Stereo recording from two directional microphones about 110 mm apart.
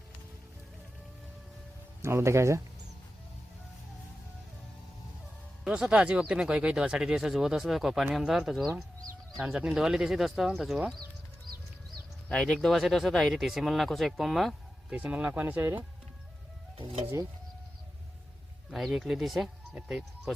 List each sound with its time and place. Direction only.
2.0 s speech: 25° right (ahead or behind)
5.6 s speech: 5° right (ahead or behind)
12.3 s speech: 5° left (ahead or behind)
14.9 s speech: 10° right (ahead or behind)
18.7 s speech: centre (ahead or behind)